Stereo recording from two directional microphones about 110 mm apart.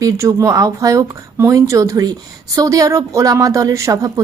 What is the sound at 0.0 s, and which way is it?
A woman's voice, 30° right (ahead or behind).